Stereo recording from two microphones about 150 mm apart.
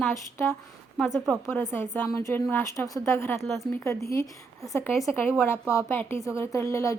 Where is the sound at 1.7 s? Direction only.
15° left (ahead or behind).